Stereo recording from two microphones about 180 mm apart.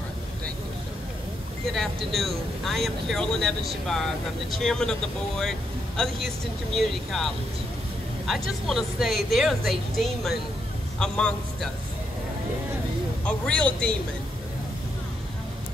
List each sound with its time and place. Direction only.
1.7 s speech: centre (ahead or behind)
13.2 s speech: 5° left (ahead or behind)